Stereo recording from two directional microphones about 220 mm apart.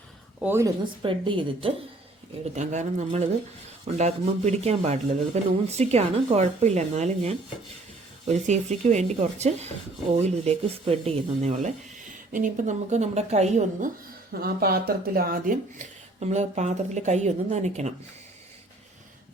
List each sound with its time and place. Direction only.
0.4 s a woman's voice: 10° right (ahead or behind)
1.0 s speech: 20° right (ahead or behind)